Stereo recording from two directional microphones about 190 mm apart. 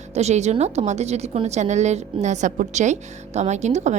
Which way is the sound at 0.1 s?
35° right (ahead or behind).